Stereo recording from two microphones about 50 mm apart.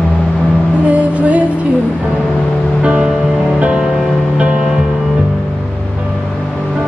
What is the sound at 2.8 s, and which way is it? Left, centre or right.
Music, right.